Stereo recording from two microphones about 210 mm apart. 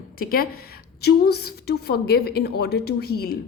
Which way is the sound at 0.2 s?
45° left (ahead or behind).